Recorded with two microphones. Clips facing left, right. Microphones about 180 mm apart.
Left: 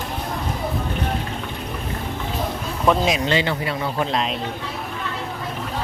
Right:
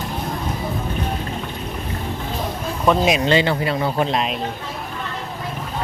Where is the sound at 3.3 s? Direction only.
35° right (ahead or behind).